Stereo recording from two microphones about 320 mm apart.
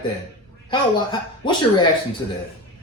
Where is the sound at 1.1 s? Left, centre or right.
Centre.